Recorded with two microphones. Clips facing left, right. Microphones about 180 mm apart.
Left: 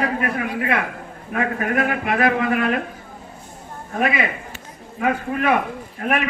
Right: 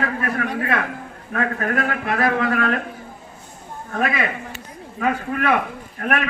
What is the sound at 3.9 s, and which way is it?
A man's voice, 15° left (ahead or behind).